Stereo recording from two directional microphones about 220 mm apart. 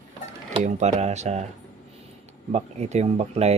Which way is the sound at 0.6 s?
30° right (ahead or behind).